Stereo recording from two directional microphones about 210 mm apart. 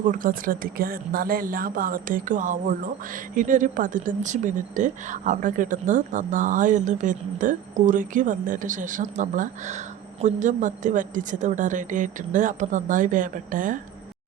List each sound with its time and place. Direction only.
0.0 s speech: 40° right (ahead or behind)